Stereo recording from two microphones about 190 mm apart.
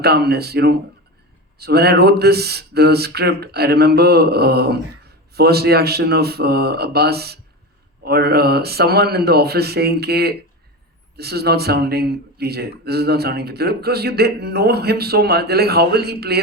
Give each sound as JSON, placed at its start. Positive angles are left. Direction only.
{"t": 0.0, "sound": "speech", "side_deg": -55}